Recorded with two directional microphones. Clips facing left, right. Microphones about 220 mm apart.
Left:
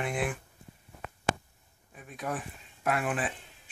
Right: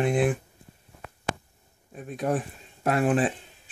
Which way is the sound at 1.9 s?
35° right (ahead or behind).